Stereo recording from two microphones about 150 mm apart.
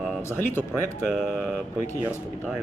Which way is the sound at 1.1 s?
Centre (ahead or behind).